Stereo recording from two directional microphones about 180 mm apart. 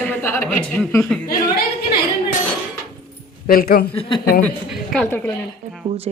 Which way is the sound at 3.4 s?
55° left (ahead or behind).